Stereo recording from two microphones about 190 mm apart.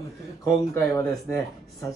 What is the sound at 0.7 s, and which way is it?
Speech, 15° left (ahead or behind).